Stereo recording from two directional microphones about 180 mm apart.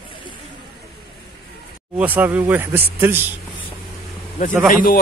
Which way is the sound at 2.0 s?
10° right (ahead or behind).